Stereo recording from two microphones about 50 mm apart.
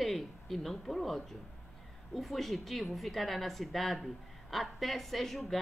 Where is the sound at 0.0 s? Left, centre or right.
Centre.